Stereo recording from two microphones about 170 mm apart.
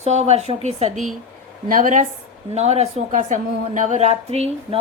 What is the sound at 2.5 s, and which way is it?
A woman's voice, 40° right (ahead or behind).